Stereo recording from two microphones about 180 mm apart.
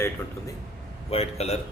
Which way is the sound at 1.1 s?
35° left (ahead or behind).